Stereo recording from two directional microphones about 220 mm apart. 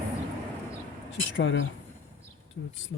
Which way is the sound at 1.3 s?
60° left (ahead or behind).